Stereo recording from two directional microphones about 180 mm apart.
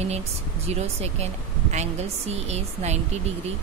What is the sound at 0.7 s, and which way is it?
Speech, 35° right (ahead or behind).